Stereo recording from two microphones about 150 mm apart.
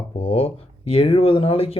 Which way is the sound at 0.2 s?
40° left (ahead or behind).